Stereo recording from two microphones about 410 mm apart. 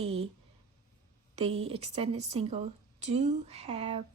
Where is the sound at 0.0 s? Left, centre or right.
Centre.